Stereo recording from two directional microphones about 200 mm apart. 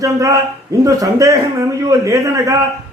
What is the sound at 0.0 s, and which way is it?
Speech, 15° right (ahead or behind).